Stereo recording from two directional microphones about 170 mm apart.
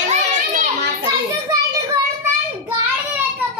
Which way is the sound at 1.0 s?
25° right (ahead or behind).